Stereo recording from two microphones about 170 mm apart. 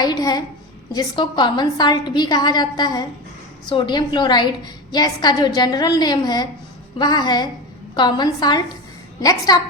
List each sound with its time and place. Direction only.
0.0 s a woman's voice: 20° left (ahead or behind)